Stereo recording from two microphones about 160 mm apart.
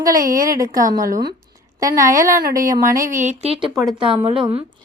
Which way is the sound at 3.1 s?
50° right (ahead or behind).